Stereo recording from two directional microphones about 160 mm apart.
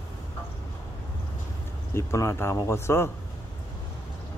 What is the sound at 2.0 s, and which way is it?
Speech, 15° left (ahead or behind).